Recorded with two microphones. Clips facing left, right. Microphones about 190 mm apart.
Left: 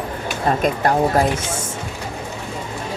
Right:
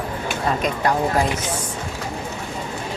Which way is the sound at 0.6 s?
50° left (ahead or behind).